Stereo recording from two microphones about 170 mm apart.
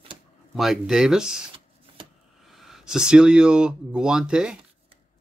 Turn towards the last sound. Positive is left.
turn(degrees=-5)  # may be behind; listen again after turning